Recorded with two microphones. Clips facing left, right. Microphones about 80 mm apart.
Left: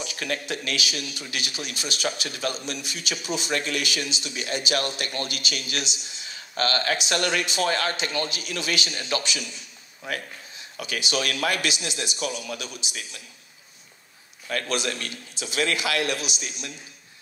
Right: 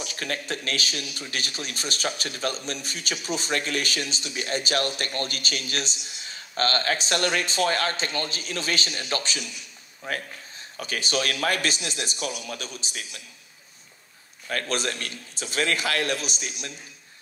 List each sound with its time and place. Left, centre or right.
0.0 s a man's voice: right
12.3 s speech: left
12.5 s a man's voice: right
14.5 s a man's voice: right